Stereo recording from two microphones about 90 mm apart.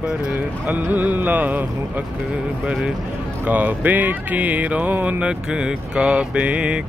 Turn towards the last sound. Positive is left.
turn(degrees=-10)  # may be behind; listen again after turning